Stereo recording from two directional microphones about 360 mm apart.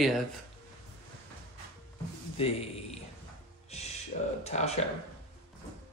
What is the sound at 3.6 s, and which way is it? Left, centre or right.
Music, centre.